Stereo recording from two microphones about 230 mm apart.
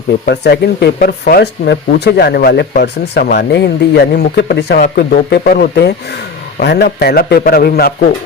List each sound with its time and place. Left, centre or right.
0.3 s speech: left